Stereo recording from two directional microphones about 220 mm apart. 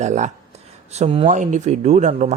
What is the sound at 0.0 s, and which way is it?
Speech, 30° right (ahead or behind).